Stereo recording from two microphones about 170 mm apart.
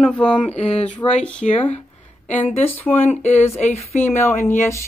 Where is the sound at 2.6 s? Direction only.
10° left (ahead or behind).